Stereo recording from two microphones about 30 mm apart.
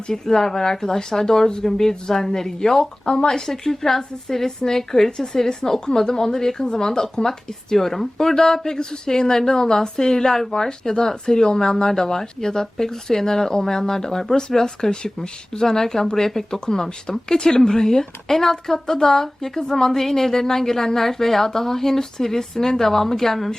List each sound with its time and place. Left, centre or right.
0.3 s speech: centre